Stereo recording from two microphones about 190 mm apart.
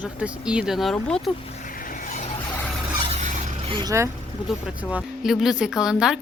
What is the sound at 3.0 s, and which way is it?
Vehicle, 35° right (ahead or behind).